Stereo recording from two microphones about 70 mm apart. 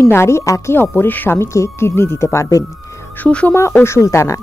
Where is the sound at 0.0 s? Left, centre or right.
Left.